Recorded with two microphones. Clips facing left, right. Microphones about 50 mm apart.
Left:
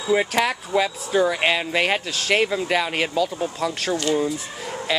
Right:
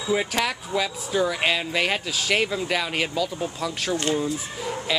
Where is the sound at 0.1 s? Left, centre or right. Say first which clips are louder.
Left 4 dB; centre.